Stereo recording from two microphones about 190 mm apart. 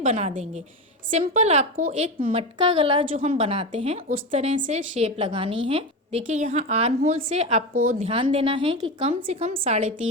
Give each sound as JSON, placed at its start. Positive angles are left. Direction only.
{"t": 0.0, "sound": "a woman's voice", "side_deg": -35}
{"t": 2.6, "sound": "a woman's voice", "side_deg": -25}